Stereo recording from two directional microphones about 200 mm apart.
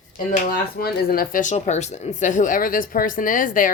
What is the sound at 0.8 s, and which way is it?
A woman's voice, 50° left (ahead or behind).